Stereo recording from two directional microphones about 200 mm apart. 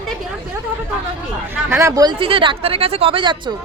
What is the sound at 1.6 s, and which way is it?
Speech, 15° right (ahead or behind).